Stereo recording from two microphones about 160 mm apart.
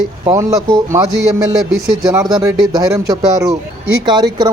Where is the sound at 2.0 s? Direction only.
20° right (ahead or behind).